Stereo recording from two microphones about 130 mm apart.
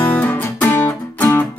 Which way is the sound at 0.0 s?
15° left (ahead or behind).